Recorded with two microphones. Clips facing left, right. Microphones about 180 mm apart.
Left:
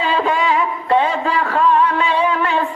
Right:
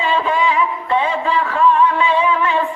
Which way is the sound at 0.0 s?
40° left (ahead or behind).